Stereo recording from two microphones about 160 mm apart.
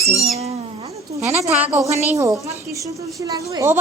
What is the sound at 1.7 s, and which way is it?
A woman's voice, 20° right (ahead or behind).